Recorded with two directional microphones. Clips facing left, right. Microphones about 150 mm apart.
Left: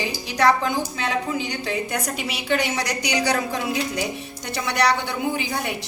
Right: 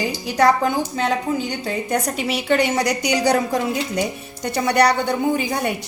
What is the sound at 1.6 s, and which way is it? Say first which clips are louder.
A woman's voice: right 4 dB; 45° right (ahead or behind).